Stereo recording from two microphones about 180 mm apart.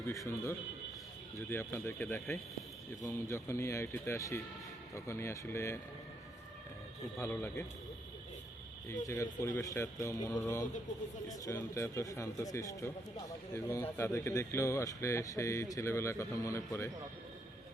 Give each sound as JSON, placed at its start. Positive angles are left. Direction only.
{"t": 0.1, "sound": "speech", "side_deg": 15}
{"t": 7.2, "sound": "speech", "side_deg": 15}
{"t": 8.9, "sound": "speech", "side_deg": 15}